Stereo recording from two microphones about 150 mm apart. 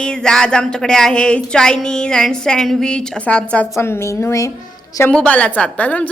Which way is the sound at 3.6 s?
20° left (ahead or behind).